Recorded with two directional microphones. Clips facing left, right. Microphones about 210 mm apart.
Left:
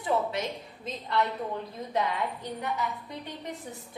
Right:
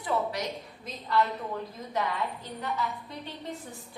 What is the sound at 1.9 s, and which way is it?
A woman's voice, 20° left (ahead or behind).